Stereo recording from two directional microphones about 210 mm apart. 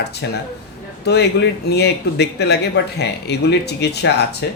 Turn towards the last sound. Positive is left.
turn(degrees=55)  # may be behind; listen again after turning